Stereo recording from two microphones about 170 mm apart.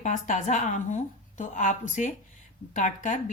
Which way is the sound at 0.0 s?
45° left (ahead or behind).